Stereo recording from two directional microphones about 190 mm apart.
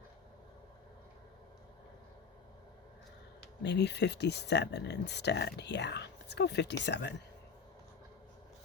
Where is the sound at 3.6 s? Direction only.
65° left (ahead or behind).